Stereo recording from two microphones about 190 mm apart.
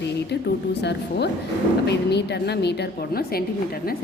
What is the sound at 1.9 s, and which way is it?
A woman's voice, 60° left (ahead or behind).